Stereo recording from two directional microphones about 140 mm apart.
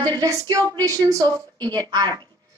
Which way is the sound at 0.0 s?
25° right (ahead or behind).